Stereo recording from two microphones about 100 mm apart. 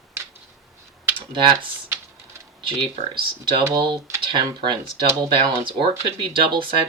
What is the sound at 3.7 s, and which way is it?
Speech, 50° right (ahead or behind).